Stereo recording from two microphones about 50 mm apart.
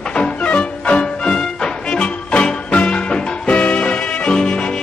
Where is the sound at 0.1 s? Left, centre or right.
Left.